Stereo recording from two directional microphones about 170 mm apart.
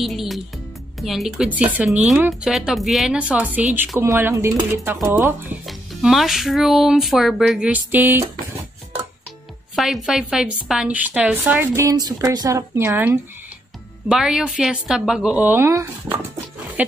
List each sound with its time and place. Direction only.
0.0 s music: centre (ahead or behind)
0.9 s speech: centre (ahead or behind)
5.7 s speech: centre (ahead or behind)
9.8 s speech: centre (ahead or behind)